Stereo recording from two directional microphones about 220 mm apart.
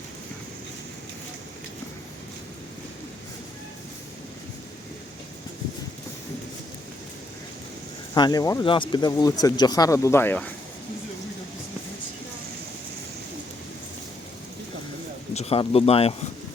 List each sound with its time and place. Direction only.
8.1 s speech: 20° left (ahead or behind)
15.4 s speech: 25° left (ahead or behind)